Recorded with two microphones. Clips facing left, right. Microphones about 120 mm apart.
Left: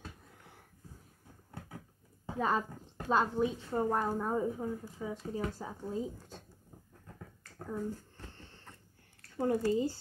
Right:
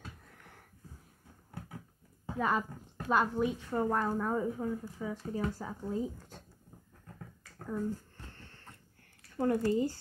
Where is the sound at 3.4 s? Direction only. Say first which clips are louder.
Even; 25° left (ahead or behind).